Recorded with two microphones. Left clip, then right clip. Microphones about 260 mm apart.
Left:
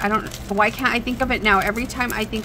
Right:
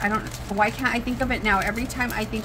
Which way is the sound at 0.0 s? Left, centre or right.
Left.